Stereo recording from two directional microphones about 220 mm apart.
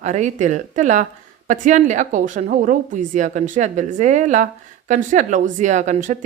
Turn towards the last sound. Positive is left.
turn(degrees=-35)  # may be behind; listen again after turning